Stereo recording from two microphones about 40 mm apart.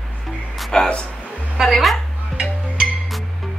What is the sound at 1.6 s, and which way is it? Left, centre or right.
Music, centre.